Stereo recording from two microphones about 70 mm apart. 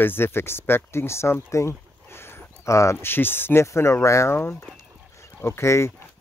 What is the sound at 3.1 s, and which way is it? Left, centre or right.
Speech, left.